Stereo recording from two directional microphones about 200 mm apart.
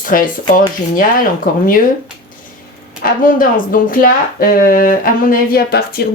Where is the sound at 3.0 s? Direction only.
45° left (ahead or behind).